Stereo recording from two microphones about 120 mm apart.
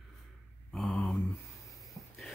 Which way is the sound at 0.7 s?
5° left (ahead or behind).